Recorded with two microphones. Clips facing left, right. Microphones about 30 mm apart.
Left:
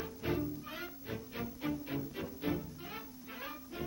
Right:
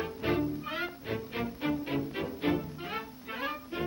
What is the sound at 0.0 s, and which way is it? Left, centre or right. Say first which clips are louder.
Music: right 6 dB; right.